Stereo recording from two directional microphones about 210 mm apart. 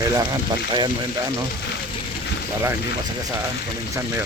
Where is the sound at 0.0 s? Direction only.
20° right (ahead or behind).